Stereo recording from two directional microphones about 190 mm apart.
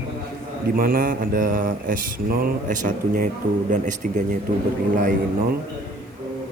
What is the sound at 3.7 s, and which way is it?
Speech, 40° right (ahead or behind).